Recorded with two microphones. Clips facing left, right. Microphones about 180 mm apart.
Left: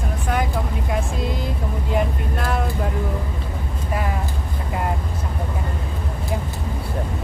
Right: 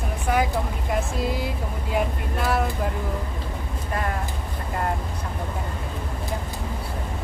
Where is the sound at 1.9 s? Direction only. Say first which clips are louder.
Left 1 dB; 5° right (ahead or behind).